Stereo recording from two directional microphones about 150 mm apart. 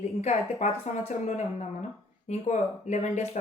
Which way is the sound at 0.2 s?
50° left (ahead or behind).